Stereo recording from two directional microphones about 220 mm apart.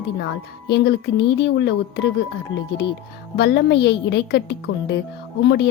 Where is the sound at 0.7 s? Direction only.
50° left (ahead or behind).